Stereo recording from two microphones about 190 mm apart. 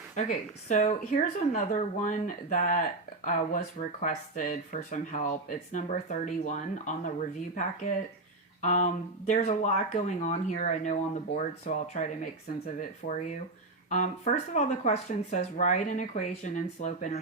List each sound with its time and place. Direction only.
0.2 s speech: 40° left (ahead or behind)